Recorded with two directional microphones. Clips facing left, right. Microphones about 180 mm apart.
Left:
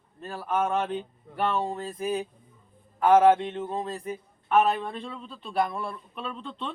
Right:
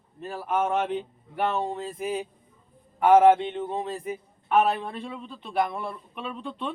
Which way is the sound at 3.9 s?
10° right (ahead or behind).